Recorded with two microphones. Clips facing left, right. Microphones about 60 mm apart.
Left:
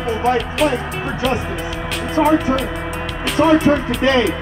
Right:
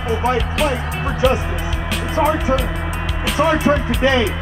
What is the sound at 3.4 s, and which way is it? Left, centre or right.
Speech, right.